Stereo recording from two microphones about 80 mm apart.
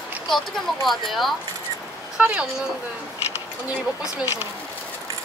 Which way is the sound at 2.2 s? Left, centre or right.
Centre.